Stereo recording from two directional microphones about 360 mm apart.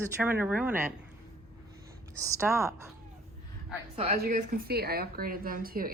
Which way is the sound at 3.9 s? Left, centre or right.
Right.